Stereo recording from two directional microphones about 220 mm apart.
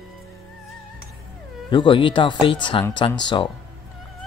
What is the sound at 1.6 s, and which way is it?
Speech, 20° left (ahead or behind).